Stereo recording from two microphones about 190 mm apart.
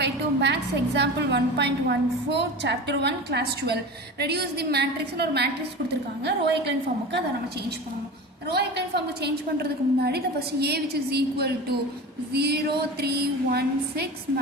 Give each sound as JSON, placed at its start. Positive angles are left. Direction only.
{"t": 0.0, "sound": "a woman's voice", "side_deg": -60}
{"t": 8.4, "sound": "a woman's voice", "side_deg": -60}